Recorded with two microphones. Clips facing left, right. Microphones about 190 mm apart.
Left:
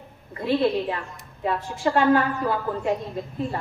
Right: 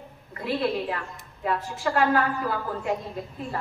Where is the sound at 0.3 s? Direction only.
25° left (ahead or behind).